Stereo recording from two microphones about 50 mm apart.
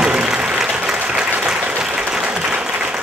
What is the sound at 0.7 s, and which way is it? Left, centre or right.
Applause, right.